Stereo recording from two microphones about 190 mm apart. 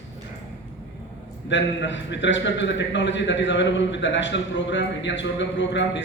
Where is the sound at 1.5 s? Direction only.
70° left (ahead or behind).